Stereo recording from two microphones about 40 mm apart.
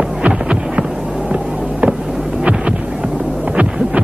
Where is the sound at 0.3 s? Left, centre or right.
Right.